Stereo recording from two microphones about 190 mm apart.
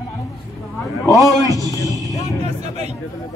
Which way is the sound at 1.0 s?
20° left (ahead or behind).